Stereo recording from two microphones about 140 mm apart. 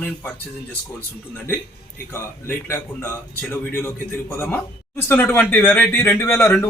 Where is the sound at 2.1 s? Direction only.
15° left (ahead or behind).